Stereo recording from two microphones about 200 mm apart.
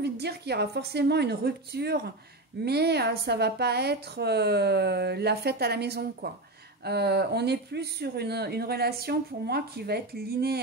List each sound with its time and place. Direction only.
0.0 s a woman's voice: 55° right (ahead or behind)